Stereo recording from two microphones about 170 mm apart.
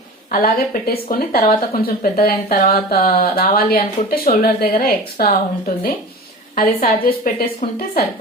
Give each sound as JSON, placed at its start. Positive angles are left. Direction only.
{"t": 0.3, "sound": "a woman's voice", "side_deg": 60}